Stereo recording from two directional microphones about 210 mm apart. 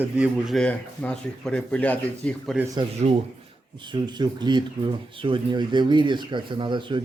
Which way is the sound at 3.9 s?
20° right (ahead or behind).